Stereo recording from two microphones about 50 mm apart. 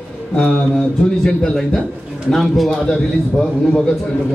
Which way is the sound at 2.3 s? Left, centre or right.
Centre.